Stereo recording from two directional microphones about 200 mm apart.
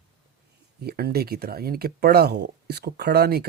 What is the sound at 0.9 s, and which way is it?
Speech, 50° right (ahead or behind).